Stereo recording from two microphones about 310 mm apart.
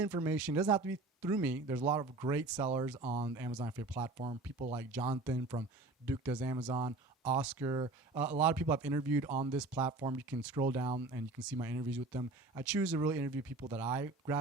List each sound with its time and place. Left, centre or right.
0.0 s speech: centre
9.6 s speech: centre